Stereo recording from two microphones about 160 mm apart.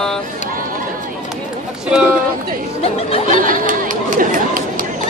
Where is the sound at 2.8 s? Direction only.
40° left (ahead or behind).